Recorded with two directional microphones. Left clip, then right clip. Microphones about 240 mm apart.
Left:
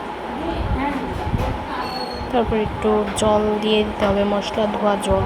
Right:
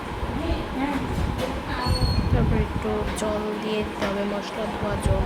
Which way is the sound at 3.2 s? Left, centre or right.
Centre.